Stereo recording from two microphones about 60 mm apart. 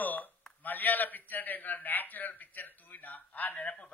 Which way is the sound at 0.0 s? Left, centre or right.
Left.